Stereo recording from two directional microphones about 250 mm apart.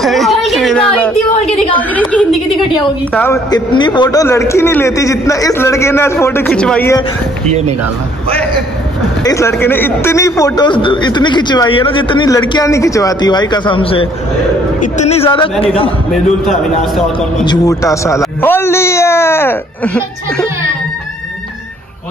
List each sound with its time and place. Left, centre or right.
0.0 s a sound: centre
1.4 s a sound: left
1.8 s a woman's voice: centre
9.2 s a man's voice: centre
16.1 s a man's voice: centre
17.5 s a man's voice: centre